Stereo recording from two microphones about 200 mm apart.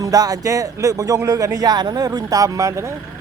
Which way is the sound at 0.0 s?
20° right (ahead or behind).